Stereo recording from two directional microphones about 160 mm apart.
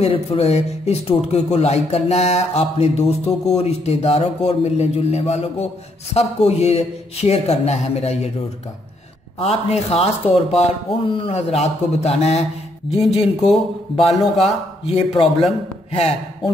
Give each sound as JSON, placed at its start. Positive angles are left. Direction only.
{"t": 0.0, "sound": "speech", "side_deg": 40}
{"t": 9.4, "sound": "speech", "side_deg": 40}
{"t": 13.5, "sound": "speech", "side_deg": 0}
{"t": 14.9, "sound": "speech", "side_deg": 40}